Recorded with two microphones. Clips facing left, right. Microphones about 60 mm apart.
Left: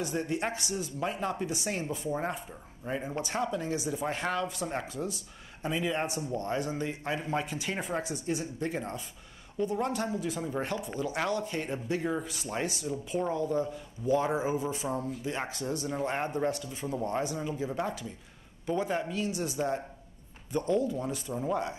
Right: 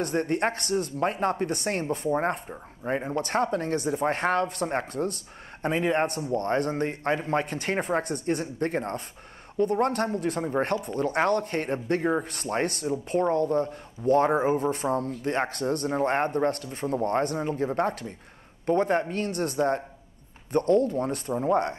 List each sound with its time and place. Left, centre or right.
0.0 s speech: right
3.2 s speech: right
12.3 s speech: right